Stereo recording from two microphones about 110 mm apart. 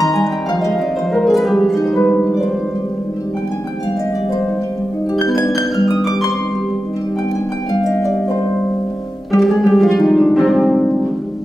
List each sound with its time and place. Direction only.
0.0 s harp: centre (ahead or behind)
5.8 s harp: centre (ahead or behind)
7.7 s harp: 30° left (ahead or behind)
9.4 s harp: centre (ahead or behind)